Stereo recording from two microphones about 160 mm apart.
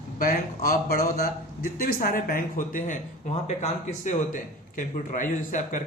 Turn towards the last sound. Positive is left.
turn(degrees=50)  # may be behind; listen again after turning